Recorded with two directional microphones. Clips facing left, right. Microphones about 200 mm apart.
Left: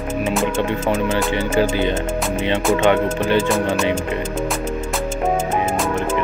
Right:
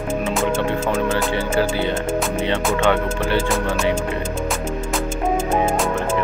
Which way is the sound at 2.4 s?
15° left (ahead or behind).